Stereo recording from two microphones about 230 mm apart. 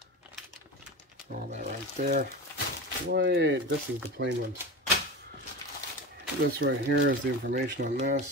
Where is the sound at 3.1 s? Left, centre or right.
Right.